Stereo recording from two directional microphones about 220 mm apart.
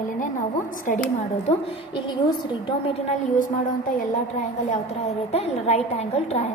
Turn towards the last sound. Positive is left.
turn(degrees=30)  # may be behind; listen again after turning